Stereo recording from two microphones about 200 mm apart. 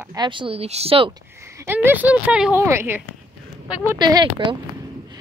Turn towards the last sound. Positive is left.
turn(degrees=-20)  # may be behind; listen again after turning